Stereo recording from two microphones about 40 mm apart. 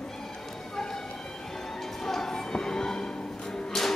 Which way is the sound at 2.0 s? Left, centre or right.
Centre.